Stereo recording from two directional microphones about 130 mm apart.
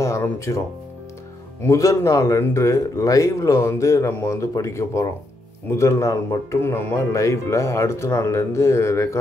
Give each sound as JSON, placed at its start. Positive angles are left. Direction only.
{"t": 0.0, "sound": "music", "side_deg": 20}
{"t": 1.6, "sound": "speech", "side_deg": 25}